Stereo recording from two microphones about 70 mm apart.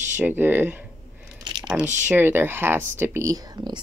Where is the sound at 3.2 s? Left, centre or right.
Right.